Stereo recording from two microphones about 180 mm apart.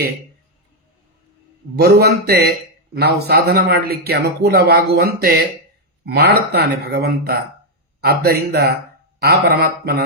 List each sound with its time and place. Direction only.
1.7 s a man's voice: 65° right (ahead or behind)